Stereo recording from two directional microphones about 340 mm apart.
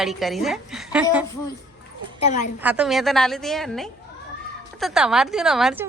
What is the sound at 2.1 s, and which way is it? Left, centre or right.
Speech, centre.